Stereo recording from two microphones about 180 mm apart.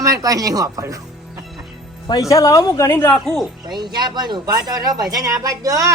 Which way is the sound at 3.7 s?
25° right (ahead or behind).